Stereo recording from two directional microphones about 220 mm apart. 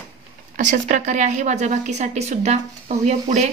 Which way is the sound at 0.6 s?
35° right (ahead or behind).